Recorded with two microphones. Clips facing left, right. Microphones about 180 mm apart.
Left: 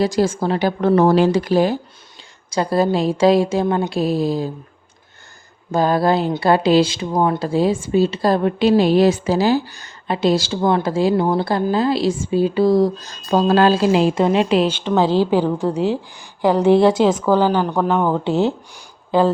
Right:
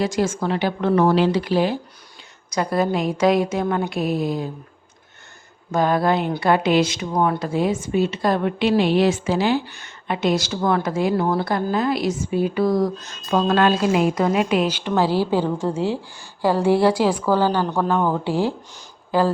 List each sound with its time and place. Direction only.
0.0 s speech: 35° left (ahead or behind)
2.5 s speech: 30° left (ahead or behind)
5.7 s a woman's voice: 35° left (ahead or behind)